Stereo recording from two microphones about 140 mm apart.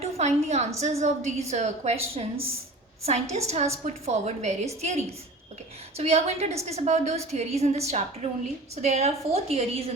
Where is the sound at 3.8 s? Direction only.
55° right (ahead or behind).